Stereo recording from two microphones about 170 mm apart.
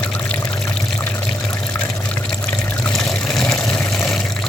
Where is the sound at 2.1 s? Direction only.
5° left (ahead or behind).